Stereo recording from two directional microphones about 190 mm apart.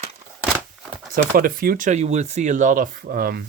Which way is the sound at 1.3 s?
50° right (ahead or behind).